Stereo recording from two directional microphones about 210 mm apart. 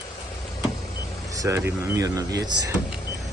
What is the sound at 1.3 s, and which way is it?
Speech, 15° right (ahead or behind).